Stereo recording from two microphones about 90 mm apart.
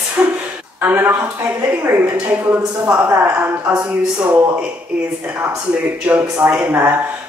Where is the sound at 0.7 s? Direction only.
20° right (ahead or behind).